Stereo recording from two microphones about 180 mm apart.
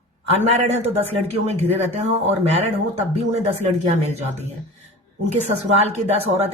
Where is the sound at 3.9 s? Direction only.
40° right (ahead or behind).